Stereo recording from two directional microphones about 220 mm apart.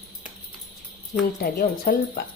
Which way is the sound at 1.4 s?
40° left (ahead or behind).